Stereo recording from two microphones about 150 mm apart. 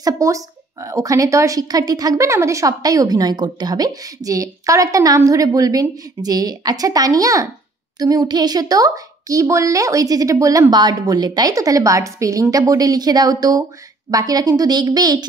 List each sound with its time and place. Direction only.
0.0 s speech: 20° right (ahead or behind)